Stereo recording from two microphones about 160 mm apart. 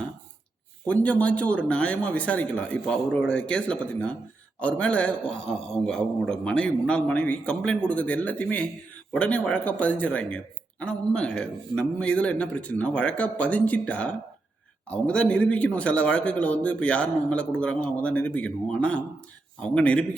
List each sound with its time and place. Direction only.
0.9 s speech: 10° left (ahead or behind)